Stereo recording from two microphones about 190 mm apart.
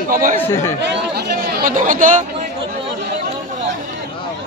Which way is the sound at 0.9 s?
55° right (ahead or behind).